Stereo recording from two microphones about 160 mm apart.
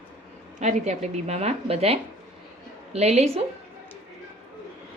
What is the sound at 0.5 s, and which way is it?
Speech, 45° right (ahead or behind).